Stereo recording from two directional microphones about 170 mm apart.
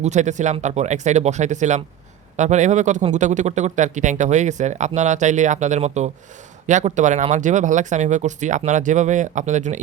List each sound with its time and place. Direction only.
0.0 s speech: 45° right (ahead or behind)